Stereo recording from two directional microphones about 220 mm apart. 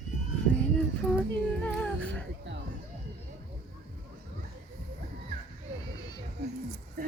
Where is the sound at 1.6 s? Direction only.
5° left (ahead or behind).